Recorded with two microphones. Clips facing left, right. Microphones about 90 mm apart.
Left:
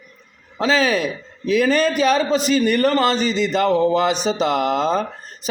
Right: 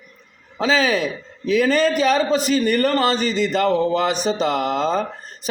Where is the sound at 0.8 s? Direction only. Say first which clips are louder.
Left 1 dB; 15° left (ahead or behind).